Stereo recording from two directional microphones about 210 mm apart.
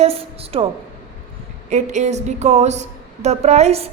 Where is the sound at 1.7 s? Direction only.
35° right (ahead or behind).